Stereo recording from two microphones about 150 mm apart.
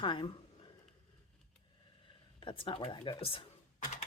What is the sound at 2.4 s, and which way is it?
Speech, 35° left (ahead or behind).